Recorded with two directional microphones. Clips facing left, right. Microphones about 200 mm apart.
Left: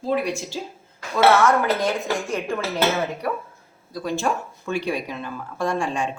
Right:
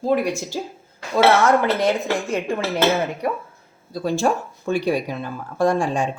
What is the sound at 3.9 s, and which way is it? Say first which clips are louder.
Speech: right 4 dB; 30° right (ahead or behind).